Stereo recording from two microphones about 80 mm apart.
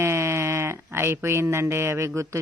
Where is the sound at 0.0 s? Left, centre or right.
Right.